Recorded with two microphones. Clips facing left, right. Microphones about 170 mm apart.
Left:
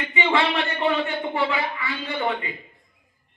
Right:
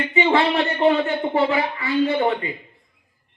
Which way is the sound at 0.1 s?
40° right (ahead or behind).